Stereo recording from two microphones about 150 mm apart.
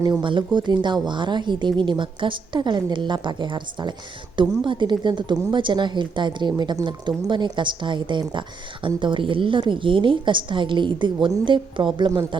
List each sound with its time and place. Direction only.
0.0 s speech: 30° right (ahead or behind)